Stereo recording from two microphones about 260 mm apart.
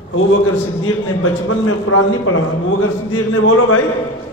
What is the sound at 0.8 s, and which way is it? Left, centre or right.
A man's voice, left.